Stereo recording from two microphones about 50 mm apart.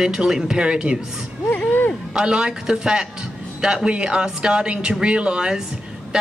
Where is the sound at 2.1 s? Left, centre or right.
Centre.